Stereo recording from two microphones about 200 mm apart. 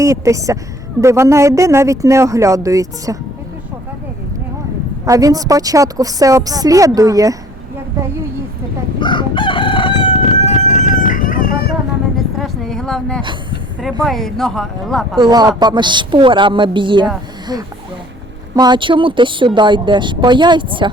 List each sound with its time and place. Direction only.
0.0 s a woman's voice: 15° right (ahead or behind)
5.0 s a woman's voice: 15° right (ahead or behind)
9.0 s chicken: 25° left (ahead or behind); by 11.5 s 45° left (ahead or behind)
12.1 s a sound: centre (ahead or behind)
14.0 s speech: centre (ahead or behind)
15.2 s speech: 20° right (ahead or behind)
18.5 s speech: 20° right (ahead or behind)